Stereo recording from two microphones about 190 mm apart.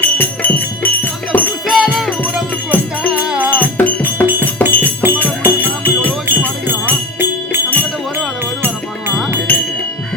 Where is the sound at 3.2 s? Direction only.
5° right (ahead or behind).